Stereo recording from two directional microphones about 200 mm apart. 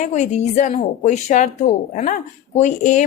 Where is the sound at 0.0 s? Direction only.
35° left (ahead or behind).